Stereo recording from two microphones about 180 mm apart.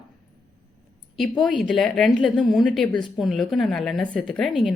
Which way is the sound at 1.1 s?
Centre (ahead or behind).